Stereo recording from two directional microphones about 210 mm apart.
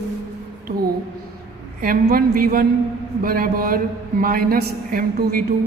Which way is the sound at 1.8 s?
45° right (ahead or behind).